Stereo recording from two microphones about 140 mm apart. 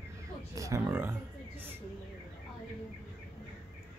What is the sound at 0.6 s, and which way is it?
Speech, 25° right (ahead or behind).